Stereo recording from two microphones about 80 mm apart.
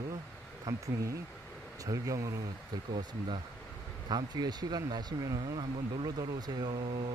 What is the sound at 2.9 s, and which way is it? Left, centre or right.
Speech, right.